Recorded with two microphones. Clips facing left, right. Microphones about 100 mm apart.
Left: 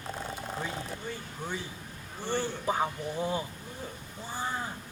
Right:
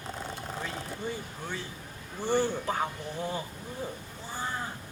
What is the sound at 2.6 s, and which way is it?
Speech, 15° left (ahead or behind).